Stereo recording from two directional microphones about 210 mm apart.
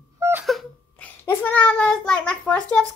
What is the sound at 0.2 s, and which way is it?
Wail, 10° right (ahead or behind).